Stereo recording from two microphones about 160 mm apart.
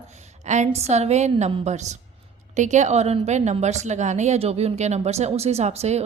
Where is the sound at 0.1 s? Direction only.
45° right (ahead or behind).